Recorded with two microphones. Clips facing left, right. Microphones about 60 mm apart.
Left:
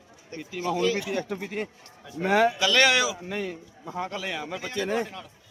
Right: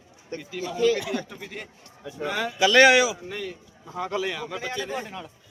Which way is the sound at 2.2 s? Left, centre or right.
Left.